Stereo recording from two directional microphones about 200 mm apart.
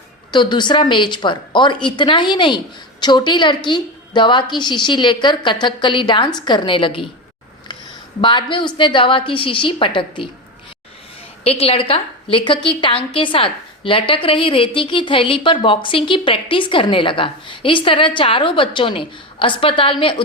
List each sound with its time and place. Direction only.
0.3 s a woman's voice: 25° left (ahead or behind)
8.2 s a woman's voice: 25° left (ahead or behind)
11.4 s a woman's voice: 30° left (ahead or behind)